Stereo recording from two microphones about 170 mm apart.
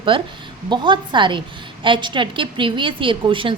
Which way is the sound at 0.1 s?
30° right (ahead or behind).